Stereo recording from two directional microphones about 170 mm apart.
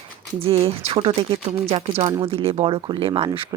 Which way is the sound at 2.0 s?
25° right (ahead or behind).